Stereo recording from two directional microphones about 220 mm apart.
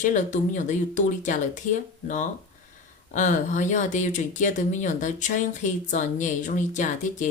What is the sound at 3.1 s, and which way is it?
Speech, 35° left (ahead or behind).